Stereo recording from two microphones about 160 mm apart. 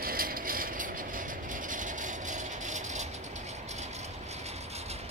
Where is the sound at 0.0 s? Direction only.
65° right (ahead or behind).